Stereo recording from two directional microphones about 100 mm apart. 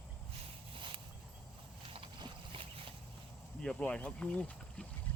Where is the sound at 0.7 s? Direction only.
65° right (ahead or behind).